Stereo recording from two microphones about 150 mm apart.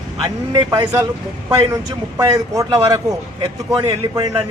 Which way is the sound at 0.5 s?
25° right (ahead or behind).